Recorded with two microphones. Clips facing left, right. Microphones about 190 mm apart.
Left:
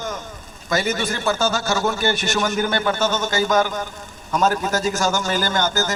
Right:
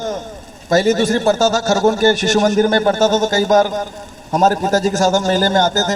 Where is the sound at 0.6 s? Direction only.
45° right (ahead or behind).